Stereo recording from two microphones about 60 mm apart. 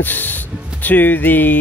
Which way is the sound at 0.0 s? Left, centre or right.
Left.